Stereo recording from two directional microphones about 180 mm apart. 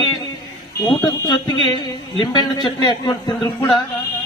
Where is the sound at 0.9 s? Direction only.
20° left (ahead or behind).